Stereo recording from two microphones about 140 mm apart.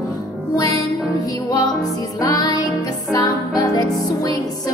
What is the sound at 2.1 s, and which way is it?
Music, 25° left (ahead or behind).